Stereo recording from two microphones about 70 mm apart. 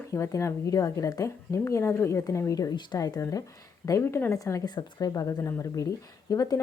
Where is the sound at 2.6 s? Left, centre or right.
Left.